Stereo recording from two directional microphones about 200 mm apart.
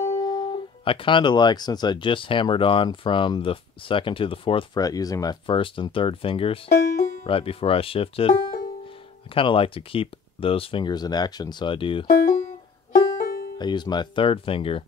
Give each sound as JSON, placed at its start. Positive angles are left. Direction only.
{"t": 0.2, "sound": "speech", "side_deg": 20}
{"t": 12.1, "sound": "music", "side_deg": 45}
{"t": 13.6, "sound": "speech", "side_deg": 20}